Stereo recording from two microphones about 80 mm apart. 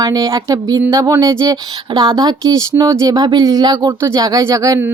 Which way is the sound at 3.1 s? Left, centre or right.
Right.